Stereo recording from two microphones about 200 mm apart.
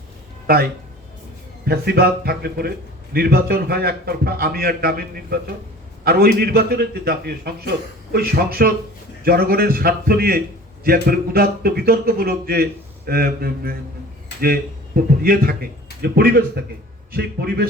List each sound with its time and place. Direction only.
0.5 s a man's voice: 50° right (ahead or behind)